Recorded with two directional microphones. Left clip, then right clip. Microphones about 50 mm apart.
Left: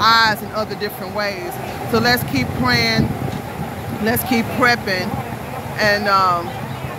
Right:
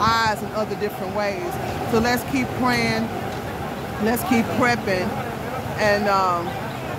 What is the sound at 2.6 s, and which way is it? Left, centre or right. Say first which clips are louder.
Speech: left 5 dB; right.